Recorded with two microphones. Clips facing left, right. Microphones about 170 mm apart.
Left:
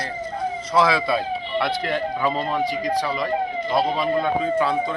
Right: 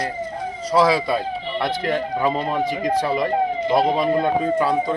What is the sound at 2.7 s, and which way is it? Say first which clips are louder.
Speech: right 3 dB; 50° right (ahead or behind).